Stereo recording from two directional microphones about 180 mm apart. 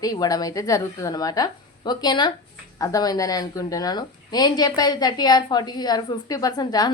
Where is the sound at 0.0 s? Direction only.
20° left (ahead or behind).